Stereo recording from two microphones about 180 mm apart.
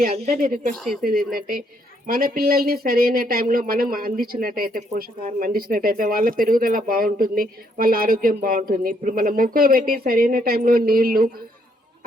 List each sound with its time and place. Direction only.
0.0 s speech: 50° right (ahead or behind)